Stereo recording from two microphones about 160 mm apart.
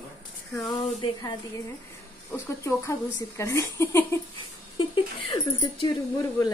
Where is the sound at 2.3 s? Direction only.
20° left (ahead or behind).